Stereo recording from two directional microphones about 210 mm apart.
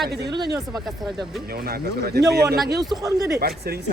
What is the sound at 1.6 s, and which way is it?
Speech, 45° right (ahead or behind).